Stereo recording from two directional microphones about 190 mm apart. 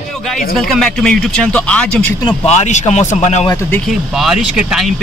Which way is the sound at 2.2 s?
35° left (ahead or behind).